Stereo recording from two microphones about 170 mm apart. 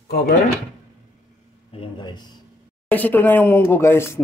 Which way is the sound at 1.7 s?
30° left (ahead or behind).